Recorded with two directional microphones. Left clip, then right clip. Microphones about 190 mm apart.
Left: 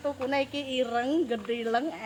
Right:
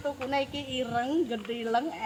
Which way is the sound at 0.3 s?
30° left (ahead or behind).